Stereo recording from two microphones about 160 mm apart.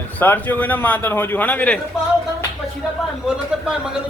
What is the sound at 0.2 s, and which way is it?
A man's voice, 10° left (ahead or behind).